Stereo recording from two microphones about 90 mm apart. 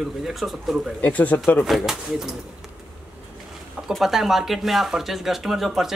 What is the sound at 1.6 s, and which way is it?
Speech, centre (ahead or behind).